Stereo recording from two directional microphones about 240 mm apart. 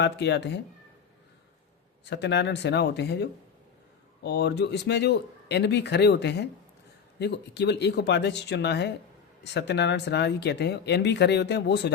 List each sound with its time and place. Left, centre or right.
0.0 s speech: left
2.0 s speech: left